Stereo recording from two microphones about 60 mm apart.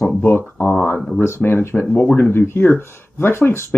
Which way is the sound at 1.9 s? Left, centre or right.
Left.